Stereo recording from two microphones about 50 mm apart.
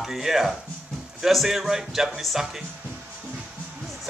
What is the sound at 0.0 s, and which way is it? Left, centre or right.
Speech, centre.